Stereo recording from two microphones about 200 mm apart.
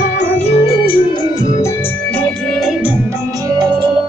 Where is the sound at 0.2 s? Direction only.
30° left (ahead or behind).